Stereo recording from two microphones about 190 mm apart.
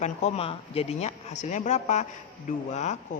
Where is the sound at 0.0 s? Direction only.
35° left (ahead or behind).